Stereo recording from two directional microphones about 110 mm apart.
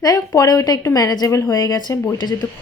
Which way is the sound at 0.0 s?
30° left (ahead or behind).